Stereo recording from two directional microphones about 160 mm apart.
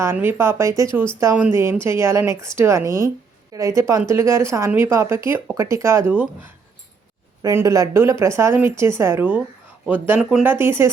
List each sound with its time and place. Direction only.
0.0 s speech: 15° right (ahead or behind)